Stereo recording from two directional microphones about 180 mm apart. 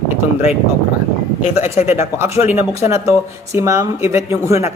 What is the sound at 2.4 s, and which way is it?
Speech, 35° left (ahead or behind).